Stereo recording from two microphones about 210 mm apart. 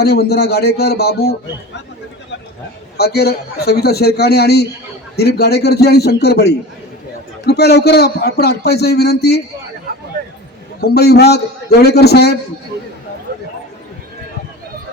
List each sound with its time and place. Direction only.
0.0 s speech: 50° left (ahead or behind)
3.0 s speech: 50° left (ahead or behind)
10.8 s speech: 50° left (ahead or behind)